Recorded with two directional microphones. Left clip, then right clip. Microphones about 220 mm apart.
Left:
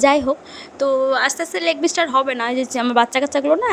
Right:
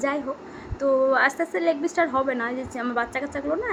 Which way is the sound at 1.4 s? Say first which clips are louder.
Left 4 dB; 50° left (ahead or behind).